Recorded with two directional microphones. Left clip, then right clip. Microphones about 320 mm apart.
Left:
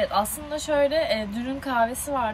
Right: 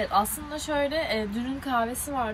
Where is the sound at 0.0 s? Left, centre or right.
Centre.